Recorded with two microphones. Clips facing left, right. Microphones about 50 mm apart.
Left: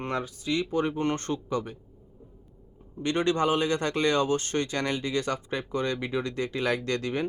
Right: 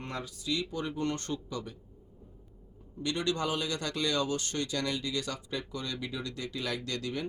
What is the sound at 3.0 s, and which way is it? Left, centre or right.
Speech, left.